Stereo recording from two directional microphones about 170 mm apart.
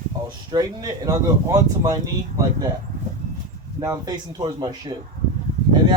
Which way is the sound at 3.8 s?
25° right (ahead or behind).